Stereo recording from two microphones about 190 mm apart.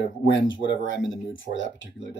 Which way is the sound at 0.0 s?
70° left (ahead or behind).